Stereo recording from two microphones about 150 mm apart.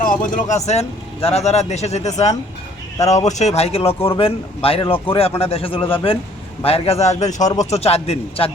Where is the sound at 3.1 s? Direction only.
50° left (ahead or behind).